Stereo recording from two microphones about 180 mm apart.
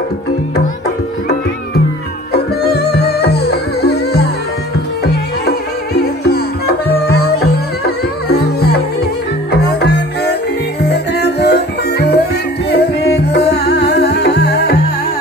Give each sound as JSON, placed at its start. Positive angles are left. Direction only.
{"t": 2.3, "sound": "music", "side_deg": 65}
{"t": 7.1, "sound": "music", "side_deg": 60}